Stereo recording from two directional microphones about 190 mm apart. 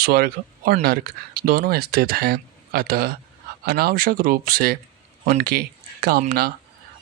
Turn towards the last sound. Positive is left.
turn(degrees=-50)  # may be behind; listen again after turning